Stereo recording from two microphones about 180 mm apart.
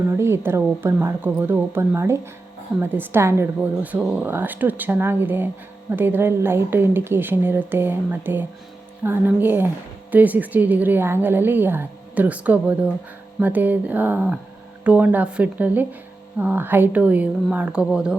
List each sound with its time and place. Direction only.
0.1 s a woman's voice: 15° right (ahead or behind)